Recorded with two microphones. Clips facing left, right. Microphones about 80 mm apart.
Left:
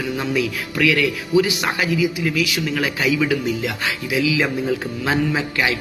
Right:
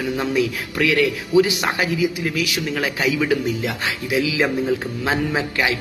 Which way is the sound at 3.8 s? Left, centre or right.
Right.